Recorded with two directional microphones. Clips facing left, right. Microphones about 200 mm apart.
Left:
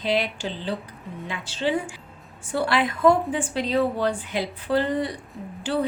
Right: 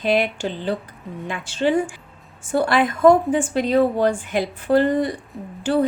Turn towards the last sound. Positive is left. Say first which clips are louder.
# right 6 dB
turn(degrees=-45)  # may be behind; listen again after turning